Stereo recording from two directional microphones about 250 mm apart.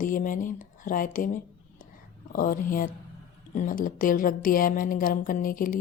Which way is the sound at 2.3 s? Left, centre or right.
Left.